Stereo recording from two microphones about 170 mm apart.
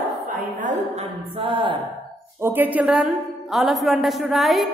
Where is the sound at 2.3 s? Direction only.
10° right (ahead or behind).